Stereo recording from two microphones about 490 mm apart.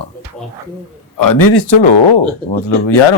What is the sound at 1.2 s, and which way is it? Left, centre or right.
Speech, left.